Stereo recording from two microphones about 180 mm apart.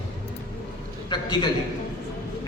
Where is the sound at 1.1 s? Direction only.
25° left (ahead or behind).